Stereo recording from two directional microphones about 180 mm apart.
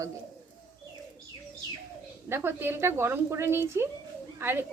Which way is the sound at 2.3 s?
10° right (ahead or behind).